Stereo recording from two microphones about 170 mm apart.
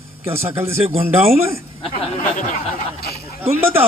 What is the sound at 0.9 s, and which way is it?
Speech, 15° right (ahead or behind).